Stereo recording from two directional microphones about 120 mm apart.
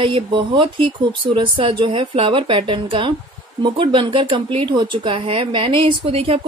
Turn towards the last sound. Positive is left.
turn(degrees=-50)  # may be behind; listen again after turning